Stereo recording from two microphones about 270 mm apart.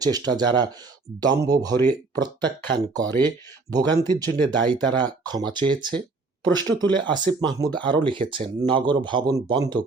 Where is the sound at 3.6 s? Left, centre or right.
Centre.